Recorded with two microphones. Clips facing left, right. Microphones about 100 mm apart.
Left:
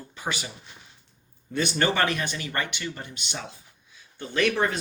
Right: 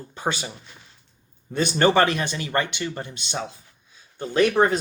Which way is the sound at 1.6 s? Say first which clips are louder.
Right 6 dB; 40° right (ahead or behind).